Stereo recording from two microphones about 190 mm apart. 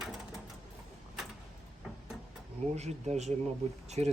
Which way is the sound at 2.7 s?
35° right (ahead or behind).